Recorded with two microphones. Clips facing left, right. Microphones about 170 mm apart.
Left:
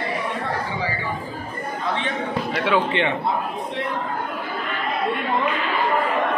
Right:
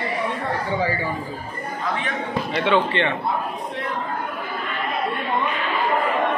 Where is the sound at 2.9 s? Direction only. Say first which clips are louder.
Left 1 dB; 15° left (ahead or behind).